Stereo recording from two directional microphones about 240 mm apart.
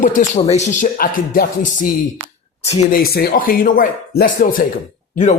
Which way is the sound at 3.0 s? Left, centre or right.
Left.